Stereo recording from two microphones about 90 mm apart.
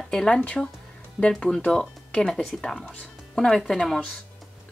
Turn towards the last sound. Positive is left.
turn(degrees=5)  # may be behind; listen again after turning